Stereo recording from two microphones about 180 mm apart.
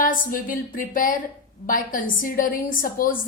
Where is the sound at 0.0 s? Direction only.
50° left (ahead or behind).